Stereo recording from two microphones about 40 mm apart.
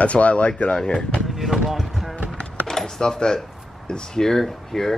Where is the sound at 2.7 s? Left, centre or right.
Centre.